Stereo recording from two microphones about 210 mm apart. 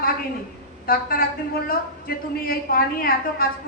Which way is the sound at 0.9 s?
45° left (ahead or behind).